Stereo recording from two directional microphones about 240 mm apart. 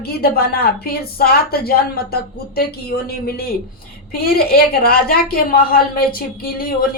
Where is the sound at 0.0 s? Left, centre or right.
Left.